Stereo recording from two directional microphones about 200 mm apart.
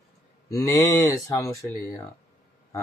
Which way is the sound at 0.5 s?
15° left (ahead or behind).